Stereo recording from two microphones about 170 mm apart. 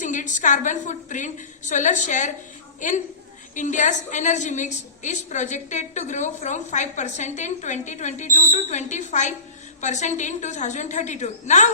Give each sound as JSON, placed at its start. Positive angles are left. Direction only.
{"t": 0.0, "sound": "a woman's voice", "side_deg": 45}